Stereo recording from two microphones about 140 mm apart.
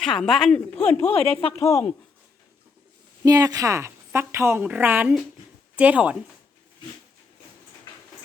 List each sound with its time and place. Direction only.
0.0 s speech: 5° left (ahead or behind)
1.0 s speech: 45° left (ahead or behind)
1.5 s speech: 20° left (ahead or behind)
3.2 s a woman's voice: 25° right (ahead or behind); by 6.1 s 10° right (ahead or behind)